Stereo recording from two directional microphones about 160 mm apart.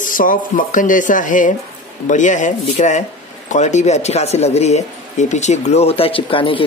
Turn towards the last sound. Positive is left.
turn(degrees=35)  # may be behind; listen again after turning